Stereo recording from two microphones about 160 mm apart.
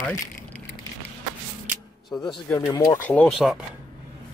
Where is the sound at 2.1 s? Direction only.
10° left (ahead or behind).